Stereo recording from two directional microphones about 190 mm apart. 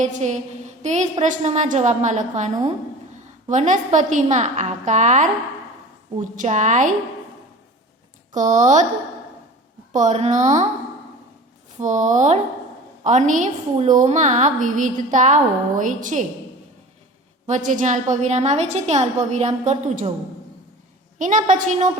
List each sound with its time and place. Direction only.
0.0 s a woman's voice: 40° right (ahead or behind)
6.3 s a woman's voice: 40° right (ahead or behind)
8.3 s a woman's voice: 40° right (ahead or behind)
9.9 s a woman's voice: 40° right (ahead or behind)
11.8 s a woman's voice: 40° right (ahead or behind)
17.4 s a woman's voice: 40° right (ahead or behind)
21.2 s a woman's voice: 40° right (ahead or behind)